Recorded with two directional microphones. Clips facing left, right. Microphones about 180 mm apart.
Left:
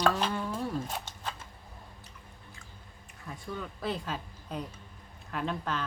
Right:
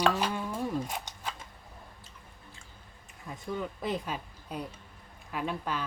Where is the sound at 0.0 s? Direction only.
10° right (ahead or behind).